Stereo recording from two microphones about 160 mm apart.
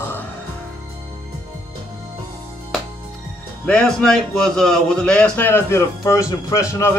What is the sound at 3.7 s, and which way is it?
A man's voice, 5° left (ahead or behind).